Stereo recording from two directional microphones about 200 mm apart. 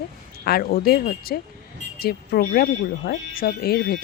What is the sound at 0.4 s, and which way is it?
Speech, 50° left (ahead or behind).